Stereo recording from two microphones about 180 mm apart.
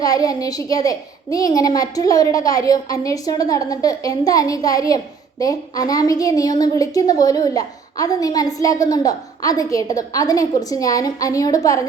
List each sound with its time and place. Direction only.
0.0 s a woman's voice: 20° left (ahead or behind)